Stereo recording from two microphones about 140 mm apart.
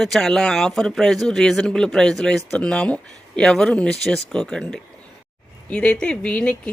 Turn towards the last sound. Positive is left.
turn(degrees=10)  # may be behind; listen again after turning